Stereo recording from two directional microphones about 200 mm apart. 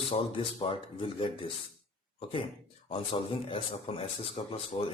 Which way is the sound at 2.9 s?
25° left (ahead or behind).